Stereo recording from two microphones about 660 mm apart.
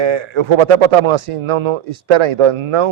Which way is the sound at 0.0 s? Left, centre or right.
Right.